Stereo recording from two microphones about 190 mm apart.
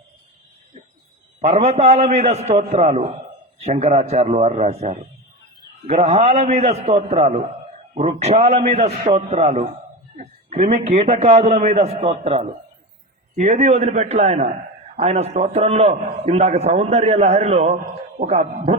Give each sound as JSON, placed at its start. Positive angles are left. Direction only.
{"t": 1.4, "sound": "a man's voice", "side_deg": -35}